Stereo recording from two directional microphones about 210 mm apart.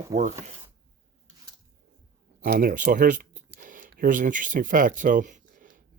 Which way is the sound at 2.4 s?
45° right (ahead or behind).